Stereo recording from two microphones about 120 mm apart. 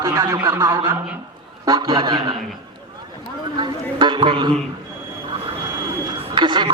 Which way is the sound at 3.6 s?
40° right (ahead or behind).